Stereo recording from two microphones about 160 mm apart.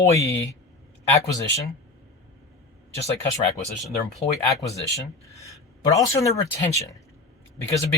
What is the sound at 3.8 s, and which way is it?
Speech, centre (ahead or behind).